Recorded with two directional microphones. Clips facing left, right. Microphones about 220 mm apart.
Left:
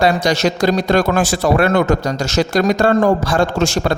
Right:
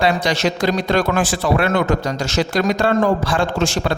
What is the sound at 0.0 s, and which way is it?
Speech, 40° left (ahead or behind).